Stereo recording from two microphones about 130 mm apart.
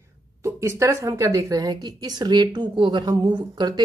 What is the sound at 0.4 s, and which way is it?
A woman's voice, 20° right (ahead or behind).